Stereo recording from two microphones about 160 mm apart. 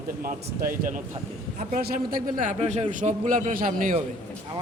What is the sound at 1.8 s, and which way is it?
Speech, 65° right (ahead or behind).